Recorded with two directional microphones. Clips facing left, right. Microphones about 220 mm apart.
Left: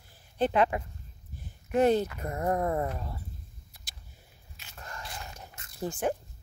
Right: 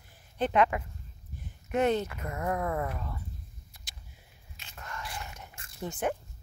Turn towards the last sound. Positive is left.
turn(degrees=30)  # may be behind; listen again after turning